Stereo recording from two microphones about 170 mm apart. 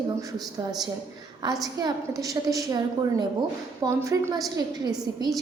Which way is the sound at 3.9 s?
15° right (ahead or behind).